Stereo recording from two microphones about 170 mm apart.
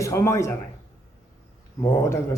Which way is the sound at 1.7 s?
20° left (ahead or behind).